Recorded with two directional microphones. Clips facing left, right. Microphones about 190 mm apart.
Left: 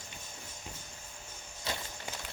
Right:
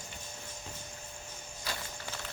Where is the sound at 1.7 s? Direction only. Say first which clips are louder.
Left 2 dB; 25° left (ahead or behind).